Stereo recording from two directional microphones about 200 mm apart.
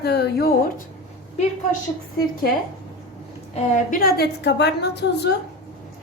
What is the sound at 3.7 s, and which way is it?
A woman's voice, 45° left (ahead or behind).